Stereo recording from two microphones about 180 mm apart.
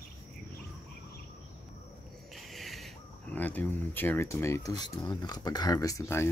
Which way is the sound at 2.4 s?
Centre (ahead or behind).